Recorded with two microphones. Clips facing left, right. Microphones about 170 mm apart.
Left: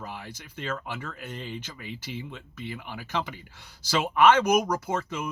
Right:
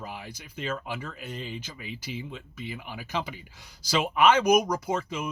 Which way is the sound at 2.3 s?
55° left (ahead or behind).